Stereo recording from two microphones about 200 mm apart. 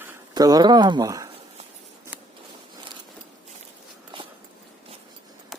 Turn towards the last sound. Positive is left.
turn(degrees=-25)  # may be behind; listen again after turning